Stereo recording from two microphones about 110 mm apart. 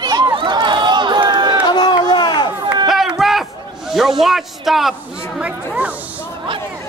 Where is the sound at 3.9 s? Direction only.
5° right (ahead or behind).